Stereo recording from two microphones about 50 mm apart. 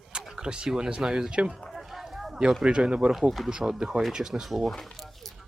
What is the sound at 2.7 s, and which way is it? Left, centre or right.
Speech, centre.